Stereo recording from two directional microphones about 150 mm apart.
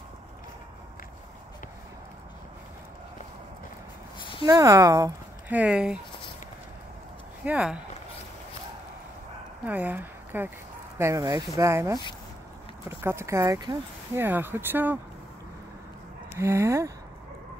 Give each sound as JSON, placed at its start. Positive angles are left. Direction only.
{"t": 4.5, "sound": "speech", "side_deg": -20}
{"t": 5.5, "sound": "speech", "side_deg": -10}
{"t": 7.4, "sound": "speech", "side_deg": -5}
{"t": 9.7, "sound": "speech", "side_deg": -10}
{"t": 14.2, "sound": "speech", "side_deg": -15}
{"t": 16.3, "sound": "speech", "side_deg": -15}